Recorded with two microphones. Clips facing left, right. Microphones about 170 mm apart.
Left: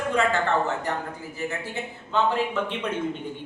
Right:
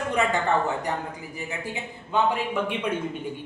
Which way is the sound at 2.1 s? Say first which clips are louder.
Even; 10° right (ahead or behind).